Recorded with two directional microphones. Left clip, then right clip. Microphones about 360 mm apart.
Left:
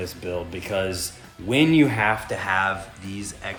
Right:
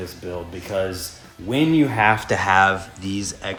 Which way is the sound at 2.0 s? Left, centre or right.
Right.